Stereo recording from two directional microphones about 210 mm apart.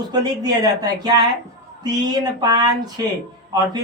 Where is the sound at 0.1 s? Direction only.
20° right (ahead or behind).